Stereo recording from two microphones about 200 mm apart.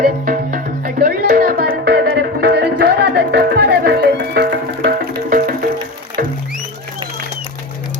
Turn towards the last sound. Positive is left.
turn(degrees=-45)  # may be behind; listen again after turning